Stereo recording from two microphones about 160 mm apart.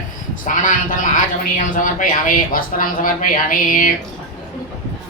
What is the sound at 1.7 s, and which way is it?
Speech, 55° left (ahead or behind).